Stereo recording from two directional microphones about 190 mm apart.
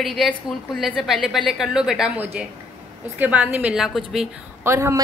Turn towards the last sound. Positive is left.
turn(degrees=-15)  # may be behind; listen again after turning